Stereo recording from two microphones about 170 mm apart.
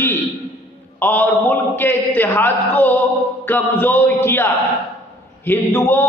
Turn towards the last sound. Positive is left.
turn(degrees=15)  # may be behind; listen again after turning